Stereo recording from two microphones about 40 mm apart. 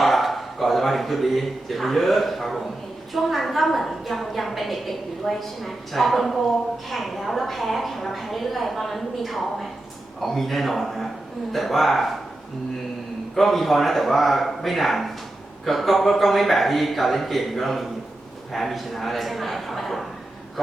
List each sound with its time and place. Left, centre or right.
0.0 s a woman's voice: centre
13.3 s a woman's voice: centre